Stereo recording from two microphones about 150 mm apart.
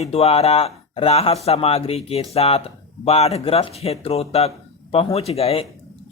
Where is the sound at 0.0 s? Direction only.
40° left (ahead or behind).